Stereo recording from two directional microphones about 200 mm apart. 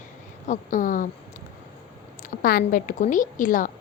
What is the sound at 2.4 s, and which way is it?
A woman's voice, 45° left (ahead or behind).